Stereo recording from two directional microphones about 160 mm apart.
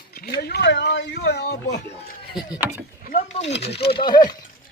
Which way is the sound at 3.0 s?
60° left (ahead or behind).